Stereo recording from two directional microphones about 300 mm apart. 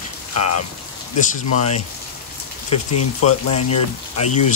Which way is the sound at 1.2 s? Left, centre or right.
Left.